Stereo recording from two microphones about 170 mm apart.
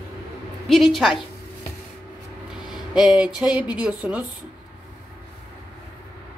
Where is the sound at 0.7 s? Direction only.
Centre (ahead or behind).